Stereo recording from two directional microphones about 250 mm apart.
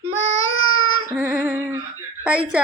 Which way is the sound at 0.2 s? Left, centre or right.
Left.